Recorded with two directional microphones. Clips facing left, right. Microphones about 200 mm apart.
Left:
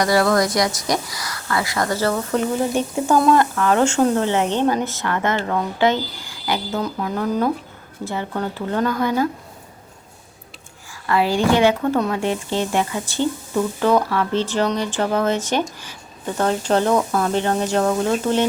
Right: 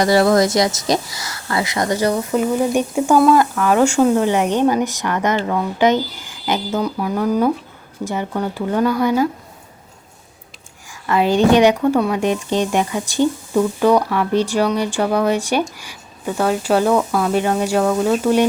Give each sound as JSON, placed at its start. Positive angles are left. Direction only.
{"t": 0.0, "sound": "speech", "side_deg": -25}
{"t": 11.0, "sound": "speech", "side_deg": -20}